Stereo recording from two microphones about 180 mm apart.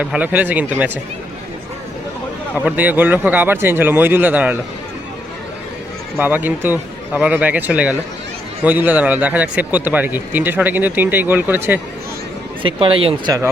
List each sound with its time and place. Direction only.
0.0 s speech: 10° right (ahead or behind)
2.6 s speech: 10° right (ahead or behind)
6.1 s speech: 10° right (ahead or behind)
12.6 s speech: 30° right (ahead or behind)